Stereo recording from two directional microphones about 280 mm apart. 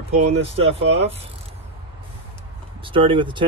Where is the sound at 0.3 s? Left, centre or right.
Right.